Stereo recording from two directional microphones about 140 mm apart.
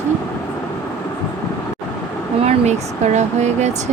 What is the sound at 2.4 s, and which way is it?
Speech, 55° right (ahead or behind).